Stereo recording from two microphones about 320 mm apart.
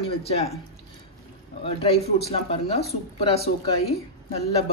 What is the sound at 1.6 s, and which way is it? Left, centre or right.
A woman's voice, centre.